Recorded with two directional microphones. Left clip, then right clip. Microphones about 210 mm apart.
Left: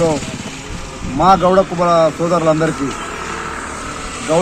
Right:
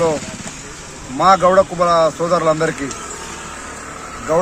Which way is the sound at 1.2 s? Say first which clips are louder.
Even; 15° right (ahead or behind).